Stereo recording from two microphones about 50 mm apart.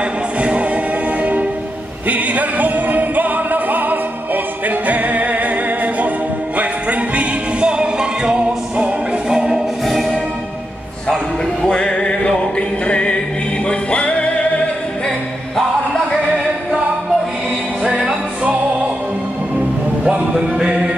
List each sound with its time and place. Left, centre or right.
0.4 s music: right
2.0 s music: right
9.8 s music: centre
11.6 s music: centre
17.9 s music: centre
20.1 s music: centre